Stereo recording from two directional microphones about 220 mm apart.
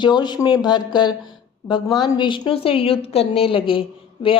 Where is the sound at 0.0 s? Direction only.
20° left (ahead or behind).